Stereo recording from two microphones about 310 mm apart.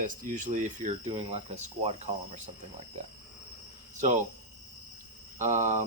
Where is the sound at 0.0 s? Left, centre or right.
Right.